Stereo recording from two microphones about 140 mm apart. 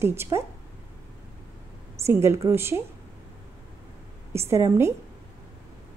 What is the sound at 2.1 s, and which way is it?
Speech, 20° right (ahead or behind).